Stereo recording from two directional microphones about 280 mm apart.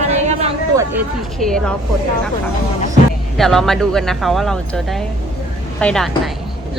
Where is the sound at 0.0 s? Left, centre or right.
Right.